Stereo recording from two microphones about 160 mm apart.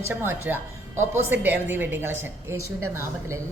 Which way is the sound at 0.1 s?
15° right (ahead or behind).